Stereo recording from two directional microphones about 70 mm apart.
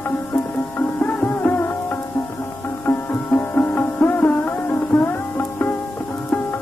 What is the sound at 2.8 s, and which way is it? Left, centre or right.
Music, left.